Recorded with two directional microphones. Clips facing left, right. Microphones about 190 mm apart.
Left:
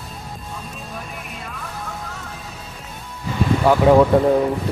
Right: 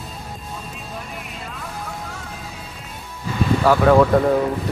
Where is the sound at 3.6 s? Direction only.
20° left (ahead or behind).